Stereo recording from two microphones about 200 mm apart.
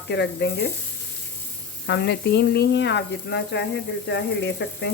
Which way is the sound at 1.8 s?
60° left (ahead or behind).